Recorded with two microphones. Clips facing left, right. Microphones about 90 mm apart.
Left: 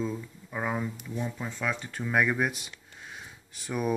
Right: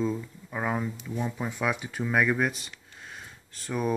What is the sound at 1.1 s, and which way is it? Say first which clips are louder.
Speech: right 4 dB; 15° right (ahead or behind).